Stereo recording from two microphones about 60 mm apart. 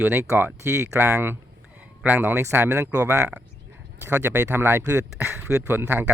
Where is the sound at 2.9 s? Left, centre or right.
Right.